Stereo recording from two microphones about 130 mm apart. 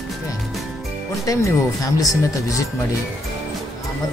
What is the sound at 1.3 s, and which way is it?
Speech, 25° left (ahead or behind).